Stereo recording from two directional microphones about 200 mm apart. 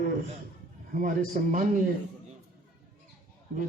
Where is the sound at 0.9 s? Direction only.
40° right (ahead or behind).